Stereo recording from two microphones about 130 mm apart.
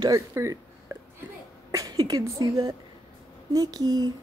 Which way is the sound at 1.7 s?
25° right (ahead or behind).